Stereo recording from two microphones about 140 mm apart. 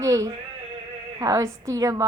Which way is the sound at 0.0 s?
25° right (ahead or behind).